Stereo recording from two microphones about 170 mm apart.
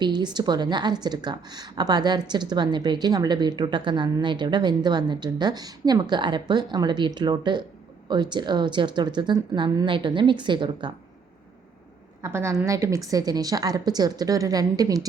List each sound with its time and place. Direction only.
0.0 s a woman's voice: 25° right (ahead or behind)
12.2 s a woman's voice: 15° right (ahead or behind)